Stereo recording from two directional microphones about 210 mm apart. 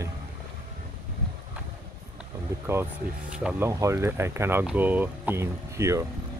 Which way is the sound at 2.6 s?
10° right (ahead or behind).